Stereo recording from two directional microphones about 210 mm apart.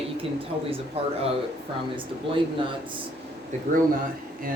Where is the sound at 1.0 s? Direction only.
30° right (ahead or behind).